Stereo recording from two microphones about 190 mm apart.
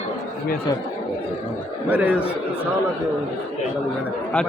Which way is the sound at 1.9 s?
10° right (ahead or behind).